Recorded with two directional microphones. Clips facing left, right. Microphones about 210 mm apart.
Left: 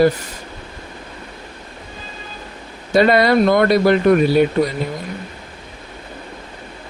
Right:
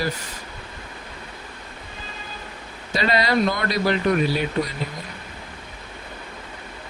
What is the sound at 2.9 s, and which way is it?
Speech, 55° left (ahead or behind).